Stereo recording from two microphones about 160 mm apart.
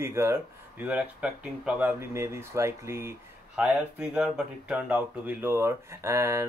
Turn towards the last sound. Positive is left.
turn(degrees=-15)  # may be behind; listen again after turning